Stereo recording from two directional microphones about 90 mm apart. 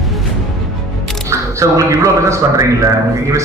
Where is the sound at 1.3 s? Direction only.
35° right (ahead or behind).